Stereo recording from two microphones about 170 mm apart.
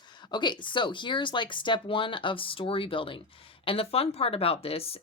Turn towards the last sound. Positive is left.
turn(degrees=35)  # may be behind; listen again after turning